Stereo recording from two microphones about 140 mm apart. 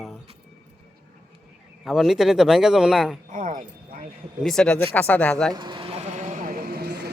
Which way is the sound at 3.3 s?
70° right (ahead or behind).